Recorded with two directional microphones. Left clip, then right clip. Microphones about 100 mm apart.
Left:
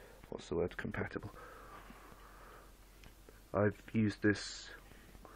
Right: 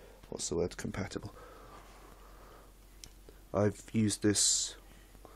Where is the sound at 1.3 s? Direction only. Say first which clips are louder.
Right 1 dB; 15° right (ahead or behind).